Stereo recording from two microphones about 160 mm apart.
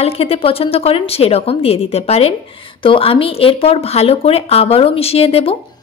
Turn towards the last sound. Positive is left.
turn(degrees=35)  # may be behind; listen again after turning